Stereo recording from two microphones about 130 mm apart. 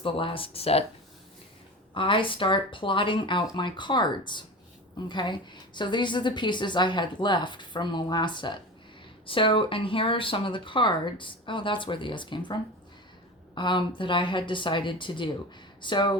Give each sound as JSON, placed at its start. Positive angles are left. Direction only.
{"t": 0.0, "sound": "speech", "side_deg": 45}
{"t": 1.9, "sound": "a woman's voice", "side_deg": 40}
{"t": 13.6, "sound": "a woman's voice", "side_deg": 35}